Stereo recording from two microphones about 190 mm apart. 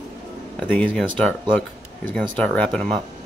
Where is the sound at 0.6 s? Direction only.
5° left (ahead or behind).